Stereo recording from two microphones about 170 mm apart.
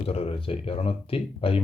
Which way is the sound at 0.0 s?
35° left (ahead or behind).